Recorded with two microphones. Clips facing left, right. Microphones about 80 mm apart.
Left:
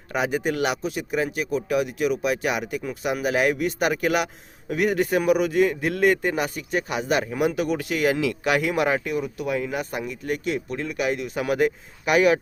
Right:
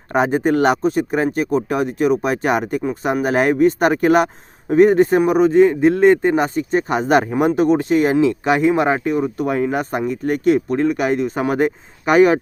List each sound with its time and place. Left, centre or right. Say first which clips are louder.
0.1 s a man's voice: right 8 dB; right